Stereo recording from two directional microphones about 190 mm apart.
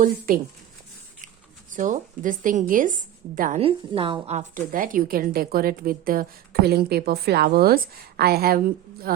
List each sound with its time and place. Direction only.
0.3 s a woman's voice: 50° right (ahead or behind)
1.7 s a woman's voice: 40° right (ahead or behind)
3.6 s a woman's voice: 30° right (ahead or behind); by 9.1 s 50° right (ahead or behind)